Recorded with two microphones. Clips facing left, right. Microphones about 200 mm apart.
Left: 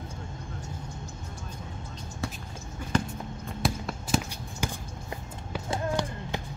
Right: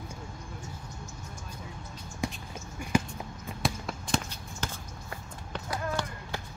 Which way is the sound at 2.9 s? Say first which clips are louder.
Even; 10° right (ahead or behind).